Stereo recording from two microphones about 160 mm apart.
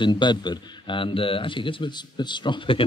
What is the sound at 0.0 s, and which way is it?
A man's voice, 30° left (ahead or behind).